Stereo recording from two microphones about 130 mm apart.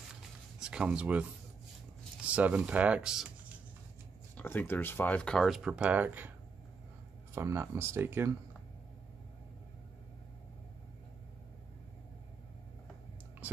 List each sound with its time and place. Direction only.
0.6 s speech: 5° right (ahead or behind)
2.2 s speech: 10° right (ahead or behind)
4.4 s speech: 15° left (ahead or behind); by 6.3 s 15° right (ahead or behind)
7.3 s speech: 20° right (ahead or behind)